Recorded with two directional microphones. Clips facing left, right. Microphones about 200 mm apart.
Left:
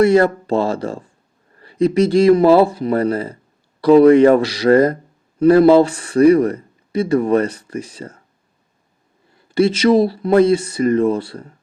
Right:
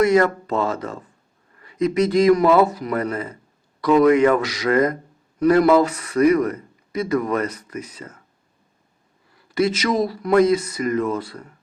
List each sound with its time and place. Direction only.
0.0 s speech: 30° left (ahead or behind)
9.3 s speech: 30° left (ahead or behind)